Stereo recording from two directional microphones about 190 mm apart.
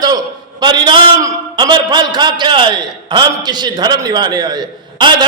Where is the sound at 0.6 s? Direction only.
25° right (ahead or behind).